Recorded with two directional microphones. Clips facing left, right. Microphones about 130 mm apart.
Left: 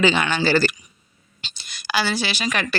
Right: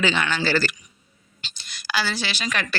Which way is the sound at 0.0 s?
15° left (ahead or behind).